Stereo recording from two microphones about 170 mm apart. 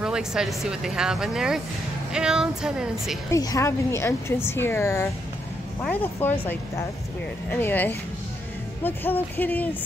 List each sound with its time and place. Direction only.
0.0 s speech: 5° right (ahead or behind)
3.3 s a woman's voice: 20° left (ahead or behind)
7.5 s a woman's voice: 10° left (ahead or behind)